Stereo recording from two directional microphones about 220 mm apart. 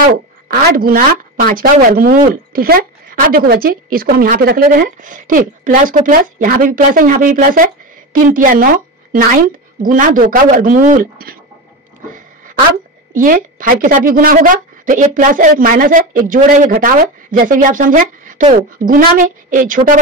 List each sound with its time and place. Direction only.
0.0 s a woman's voice: 45° right (ahead or behind)
13.1 s a woman's voice: 40° right (ahead or behind)